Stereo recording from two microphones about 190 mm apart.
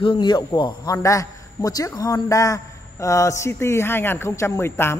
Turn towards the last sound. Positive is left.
turn(degrees=15)  # may be behind; listen again after turning